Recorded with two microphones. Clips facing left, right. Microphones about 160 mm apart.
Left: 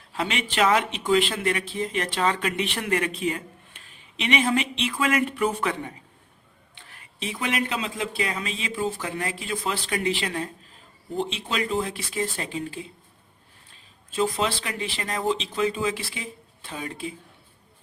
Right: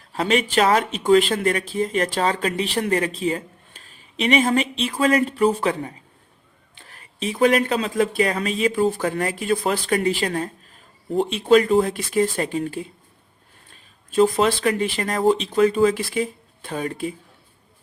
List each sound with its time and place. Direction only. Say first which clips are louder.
0.1 s speech: right 8 dB; 40° right (ahead or behind)
14.2 s speech: right 8 dB; 50° right (ahead or behind)